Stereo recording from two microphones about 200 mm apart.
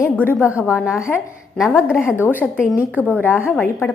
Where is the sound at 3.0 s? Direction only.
10° left (ahead or behind).